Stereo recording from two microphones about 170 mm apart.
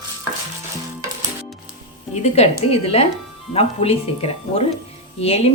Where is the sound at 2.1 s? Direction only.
40° left (ahead or behind).